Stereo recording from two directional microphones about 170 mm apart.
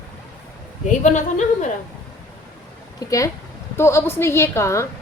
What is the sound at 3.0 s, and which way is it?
A woman's voice, 20° left (ahead or behind).